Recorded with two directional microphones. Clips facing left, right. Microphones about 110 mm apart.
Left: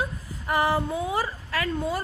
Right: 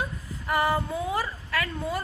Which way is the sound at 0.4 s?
20° left (ahead or behind).